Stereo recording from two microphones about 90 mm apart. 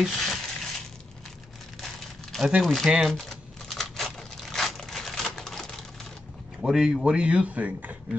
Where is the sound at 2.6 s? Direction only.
Centre (ahead or behind).